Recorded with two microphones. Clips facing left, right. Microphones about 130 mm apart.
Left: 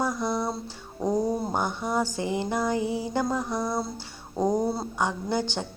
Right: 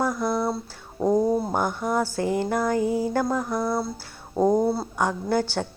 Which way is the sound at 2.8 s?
45° right (ahead or behind).